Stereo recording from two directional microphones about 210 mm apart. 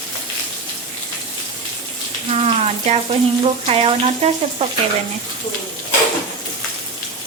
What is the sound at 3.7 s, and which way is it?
Frying, 30° right (ahead or behind).